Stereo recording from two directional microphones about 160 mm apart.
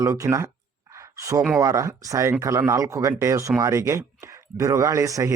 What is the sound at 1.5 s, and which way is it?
Speech, 20° right (ahead or behind).